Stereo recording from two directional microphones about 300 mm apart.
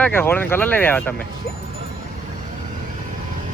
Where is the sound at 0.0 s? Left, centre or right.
Centre.